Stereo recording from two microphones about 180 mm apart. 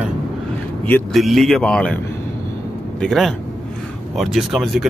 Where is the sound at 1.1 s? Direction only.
Centre (ahead or behind).